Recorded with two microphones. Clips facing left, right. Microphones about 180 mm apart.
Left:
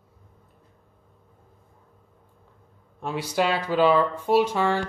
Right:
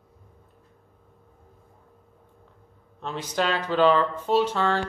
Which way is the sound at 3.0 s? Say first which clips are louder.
Left 2 dB; 10° left (ahead or behind).